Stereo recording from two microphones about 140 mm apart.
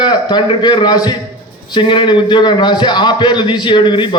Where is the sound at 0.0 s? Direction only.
30° left (ahead or behind).